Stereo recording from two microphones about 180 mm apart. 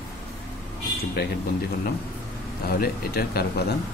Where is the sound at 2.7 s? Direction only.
60° left (ahead or behind).